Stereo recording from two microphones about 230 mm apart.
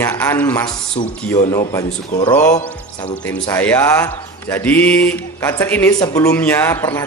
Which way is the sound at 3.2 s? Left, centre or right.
Centre.